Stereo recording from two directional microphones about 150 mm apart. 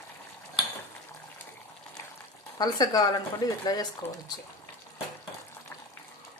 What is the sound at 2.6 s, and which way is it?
Speech, 25° left (ahead or behind).